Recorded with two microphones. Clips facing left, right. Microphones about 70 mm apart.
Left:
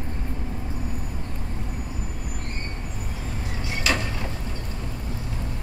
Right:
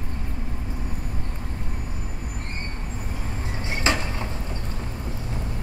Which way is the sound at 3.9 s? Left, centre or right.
Right.